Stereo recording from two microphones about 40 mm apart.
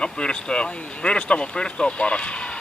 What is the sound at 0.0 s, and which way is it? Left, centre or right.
Speech, left.